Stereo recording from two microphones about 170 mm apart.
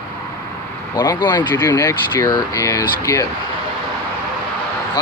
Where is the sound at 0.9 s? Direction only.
20° left (ahead or behind).